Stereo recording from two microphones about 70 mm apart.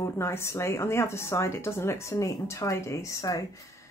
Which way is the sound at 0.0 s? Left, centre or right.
Left.